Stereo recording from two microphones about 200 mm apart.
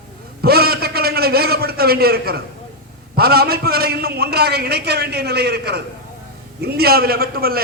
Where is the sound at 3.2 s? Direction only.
50° right (ahead or behind).